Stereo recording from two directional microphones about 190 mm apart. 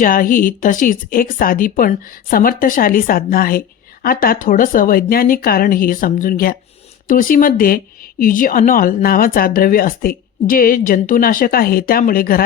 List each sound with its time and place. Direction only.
0.0 s speech: 45° left (ahead or behind)